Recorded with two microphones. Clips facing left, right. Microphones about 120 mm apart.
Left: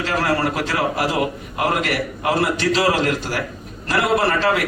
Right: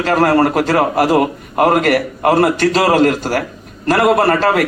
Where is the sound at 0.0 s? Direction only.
50° right (ahead or behind).